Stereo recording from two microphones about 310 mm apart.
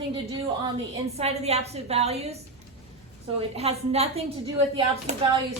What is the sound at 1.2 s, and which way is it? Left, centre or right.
A woman's voice, centre.